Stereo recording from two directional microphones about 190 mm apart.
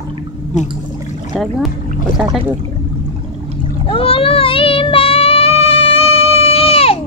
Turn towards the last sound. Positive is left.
turn(degrees=30)  # may be behind; listen again after turning